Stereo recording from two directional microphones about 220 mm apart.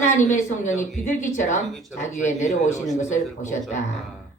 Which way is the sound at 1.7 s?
Centre (ahead or behind).